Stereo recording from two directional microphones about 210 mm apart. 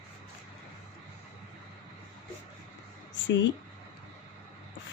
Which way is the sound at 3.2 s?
60° left (ahead or behind).